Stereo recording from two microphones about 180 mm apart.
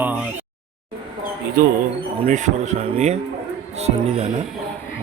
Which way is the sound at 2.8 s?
35° right (ahead or behind).